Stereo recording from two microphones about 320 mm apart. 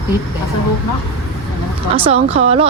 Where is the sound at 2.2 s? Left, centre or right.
Centre.